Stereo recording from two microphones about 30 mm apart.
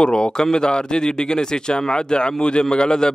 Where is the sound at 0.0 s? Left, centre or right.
Left.